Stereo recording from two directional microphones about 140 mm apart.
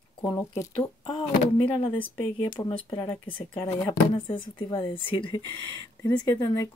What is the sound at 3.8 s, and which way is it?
Speech, 25° left (ahead or behind).